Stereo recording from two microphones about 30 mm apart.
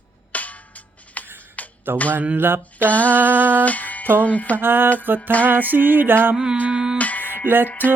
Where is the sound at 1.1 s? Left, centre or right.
Left.